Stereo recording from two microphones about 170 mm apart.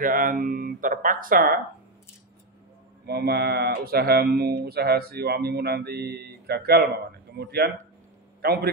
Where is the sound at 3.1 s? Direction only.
70° right (ahead or behind).